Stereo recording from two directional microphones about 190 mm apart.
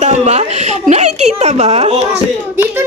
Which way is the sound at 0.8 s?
35° right (ahead or behind).